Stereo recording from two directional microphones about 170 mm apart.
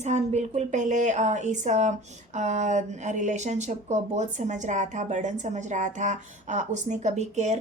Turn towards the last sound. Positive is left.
turn(degrees=-40)  # may be behind; listen again after turning